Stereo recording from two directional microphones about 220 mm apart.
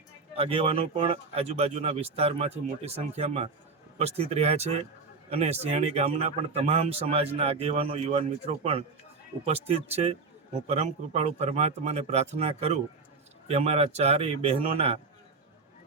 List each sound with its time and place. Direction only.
0.3 s speech: 25° right (ahead or behind)